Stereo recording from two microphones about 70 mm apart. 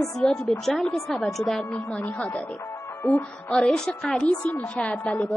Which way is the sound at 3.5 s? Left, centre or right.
Centre.